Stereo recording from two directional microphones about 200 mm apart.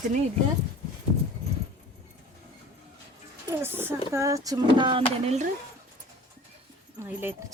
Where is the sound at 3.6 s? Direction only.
10° right (ahead or behind); by 5.5 s 35° right (ahead or behind).